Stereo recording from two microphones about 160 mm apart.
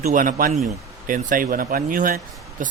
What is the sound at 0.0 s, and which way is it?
Speech, 55° right (ahead or behind).